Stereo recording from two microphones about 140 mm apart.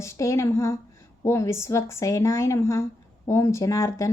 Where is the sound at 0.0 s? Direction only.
20° left (ahead or behind).